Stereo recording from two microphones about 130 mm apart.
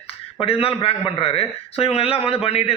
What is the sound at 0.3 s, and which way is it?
A man's voice, 45° left (ahead or behind).